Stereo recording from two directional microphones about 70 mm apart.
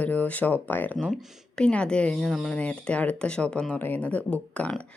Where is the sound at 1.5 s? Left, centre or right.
Centre.